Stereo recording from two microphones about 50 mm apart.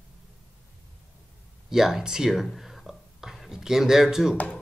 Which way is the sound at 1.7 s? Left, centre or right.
Centre.